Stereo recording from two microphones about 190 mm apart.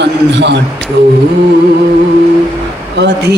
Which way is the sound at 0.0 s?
65° right (ahead or behind).